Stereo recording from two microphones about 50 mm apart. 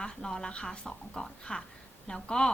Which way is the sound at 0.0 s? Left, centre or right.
Centre.